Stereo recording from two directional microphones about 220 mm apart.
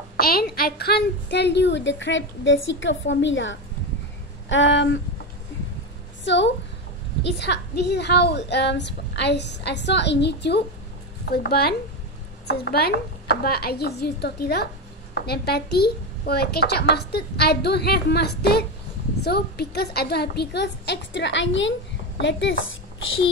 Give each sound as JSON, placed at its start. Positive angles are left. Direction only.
{"t": 0.2, "sound": "a woman's voice", "side_deg": 45}
{"t": 6.2, "sound": "a woman's voice", "side_deg": 55}